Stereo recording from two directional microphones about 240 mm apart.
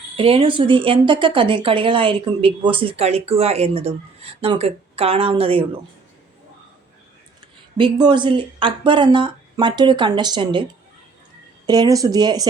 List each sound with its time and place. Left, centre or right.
0.2 s speech: right
7.8 s speech: centre
11.6 s speech: centre